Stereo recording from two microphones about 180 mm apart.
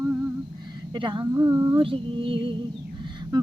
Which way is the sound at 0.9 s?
25° right (ahead or behind).